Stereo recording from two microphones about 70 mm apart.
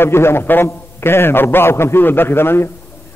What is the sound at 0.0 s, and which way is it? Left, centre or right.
A man's voice, left.